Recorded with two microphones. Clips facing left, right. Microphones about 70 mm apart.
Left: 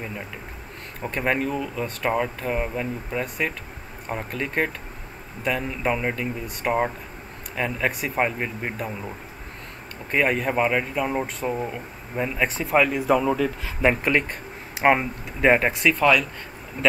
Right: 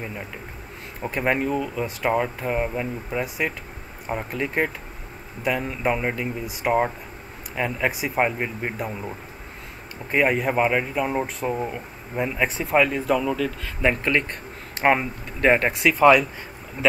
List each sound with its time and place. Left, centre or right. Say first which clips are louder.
1.0 s speech: right 1 dB; centre
10.1 s speech: right 1 dB; centre